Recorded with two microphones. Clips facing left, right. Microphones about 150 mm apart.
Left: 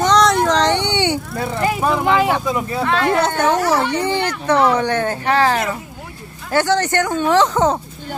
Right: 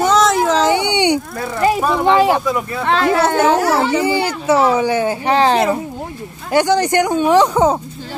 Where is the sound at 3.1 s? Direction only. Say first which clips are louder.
Right 3 dB; 5° right (ahead or behind); by 5.8 s 30° right (ahead or behind).